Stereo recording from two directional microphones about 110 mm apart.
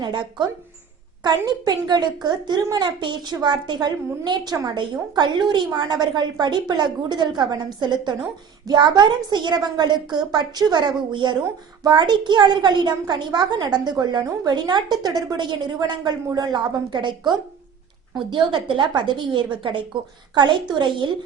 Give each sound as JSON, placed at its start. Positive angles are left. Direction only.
{"t": 0.0, "sound": "a woman's voice", "side_deg": -45}
{"t": 4.8, "sound": "a woman's voice", "side_deg": -45}